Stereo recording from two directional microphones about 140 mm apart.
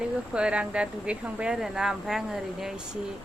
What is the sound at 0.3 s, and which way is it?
A woman's voice, 5° right (ahead or behind).